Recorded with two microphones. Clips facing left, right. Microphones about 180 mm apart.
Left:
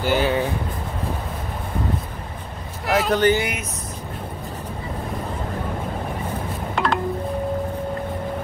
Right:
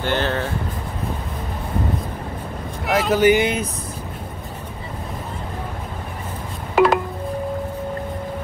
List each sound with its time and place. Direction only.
0.0 s speech: 10° left (ahead or behind)
2.9 s speech: centre (ahead or behind)
3.3 s speech: 25° right (ahead or behind)
6.7 s telephone dialing: 5° right (ahead or behind)